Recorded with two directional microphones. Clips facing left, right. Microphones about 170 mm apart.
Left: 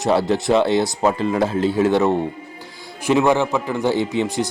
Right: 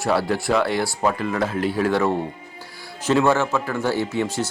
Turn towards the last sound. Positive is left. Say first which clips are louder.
# left 3 dB
turn(degrees=15)  # may be behind; listen again after turning